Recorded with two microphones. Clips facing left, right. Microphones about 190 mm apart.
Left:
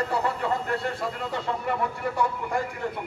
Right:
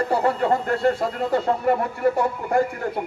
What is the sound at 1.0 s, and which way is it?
Speech, 45° right (ahead or behind).